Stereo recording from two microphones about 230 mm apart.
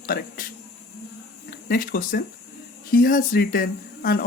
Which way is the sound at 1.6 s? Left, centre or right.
Left.